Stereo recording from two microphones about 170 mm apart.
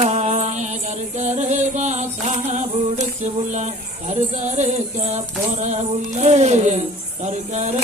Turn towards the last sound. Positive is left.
turn(degrees=-40)  # may be behind; listen again after turning